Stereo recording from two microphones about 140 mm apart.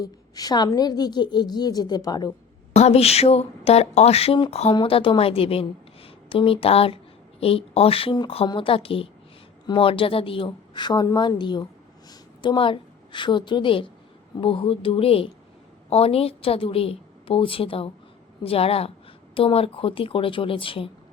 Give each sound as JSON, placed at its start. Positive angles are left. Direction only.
{"t": 0.0, "sound": "a woman's voice", "side_deg": 25}
{"t": 2.7, "sound": "a woman's voice", "side_deg": 50}